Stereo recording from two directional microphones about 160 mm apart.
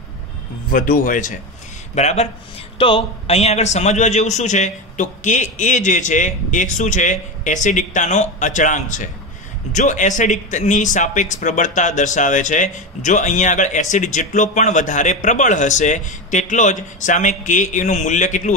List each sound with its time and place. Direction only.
0.7 s speech: 60° left (ahead or behind)
2.0 s a man's voice: 45° left (ahead or behind)